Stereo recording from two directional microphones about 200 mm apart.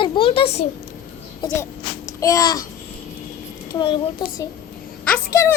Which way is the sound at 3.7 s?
25° left (ahead or behind).